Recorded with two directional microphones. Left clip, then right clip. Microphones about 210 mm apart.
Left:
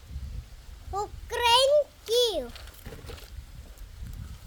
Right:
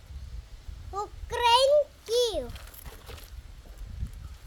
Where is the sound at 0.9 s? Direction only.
10° left (ahead or behind).